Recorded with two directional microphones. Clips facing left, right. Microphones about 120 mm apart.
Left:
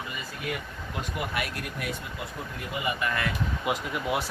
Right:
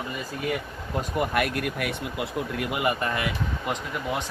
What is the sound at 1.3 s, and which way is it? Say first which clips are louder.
Speech: right 7 dB; 55° right (ahead or behind).